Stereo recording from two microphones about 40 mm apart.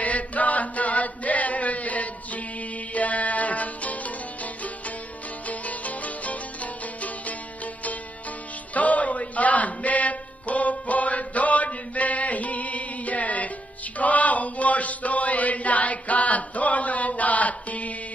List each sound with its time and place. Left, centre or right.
0.0 s chant: left
2.9 s music: left
5.5 s music: left
8.7 s music: left
13.9 s a sound: left